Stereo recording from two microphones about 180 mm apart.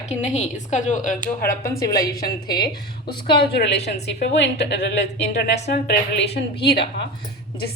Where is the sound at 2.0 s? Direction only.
55° left (ahead or behind).